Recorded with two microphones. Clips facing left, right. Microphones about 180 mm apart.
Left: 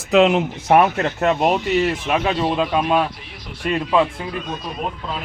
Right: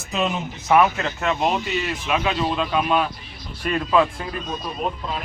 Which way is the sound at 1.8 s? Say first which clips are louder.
Left 4 dB; 40° left (ahead or behind).